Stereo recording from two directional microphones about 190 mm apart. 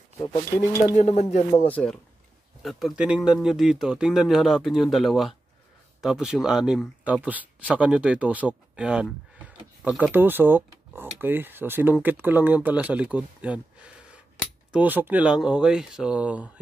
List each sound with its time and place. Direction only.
0.2 s speech: 15° left (ahead or behind)
0.9 s speech: 35° left (ahead or behind)
1.7 s speech: 5° left (ahead or behind)